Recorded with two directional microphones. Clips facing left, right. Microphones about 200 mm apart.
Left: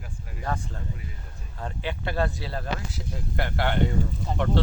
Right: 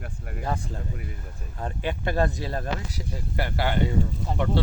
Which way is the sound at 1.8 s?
45° right (ahead or behind).